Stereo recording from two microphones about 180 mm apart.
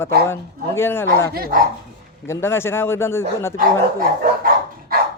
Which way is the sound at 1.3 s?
55° right (ahead or behind).